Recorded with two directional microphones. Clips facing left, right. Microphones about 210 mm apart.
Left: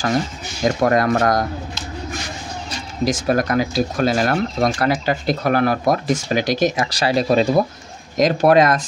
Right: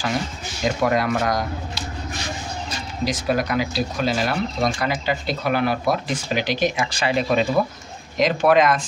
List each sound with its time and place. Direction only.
0.8 s speech: 45° left (ahead or behind)
3.1 s speech: 45° left (ahead or behind)